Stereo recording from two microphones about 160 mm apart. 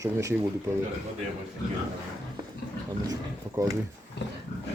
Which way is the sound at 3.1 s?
20° right (ahead or behind).